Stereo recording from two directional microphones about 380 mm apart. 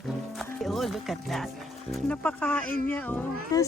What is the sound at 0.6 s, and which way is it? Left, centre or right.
Speech, centre.